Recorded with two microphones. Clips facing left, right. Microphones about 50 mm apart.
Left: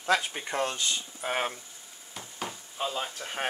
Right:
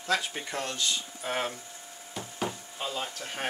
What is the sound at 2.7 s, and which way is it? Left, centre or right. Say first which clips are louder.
Speech: left 2 dB; centre.